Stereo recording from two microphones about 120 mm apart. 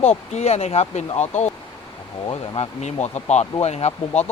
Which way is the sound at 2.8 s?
70° left (ahead or behind).